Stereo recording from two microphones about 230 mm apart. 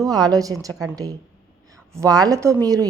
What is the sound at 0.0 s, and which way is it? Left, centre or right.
Speech, centre.